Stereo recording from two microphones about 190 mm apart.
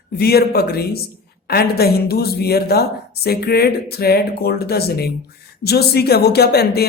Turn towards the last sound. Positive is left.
turn(degrees=55)  # may be behind; listen again after turning